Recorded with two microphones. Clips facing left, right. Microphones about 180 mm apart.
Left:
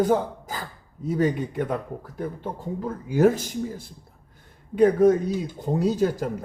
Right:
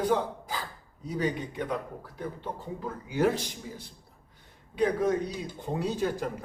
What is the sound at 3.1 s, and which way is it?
Speech, 45° left (ahead or behind).